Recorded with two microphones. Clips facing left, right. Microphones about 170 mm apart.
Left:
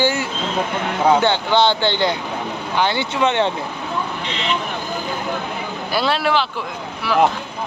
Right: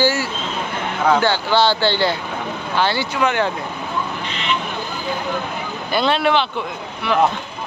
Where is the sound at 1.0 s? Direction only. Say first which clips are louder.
Left 1 dB; 20° left (ahead or behind).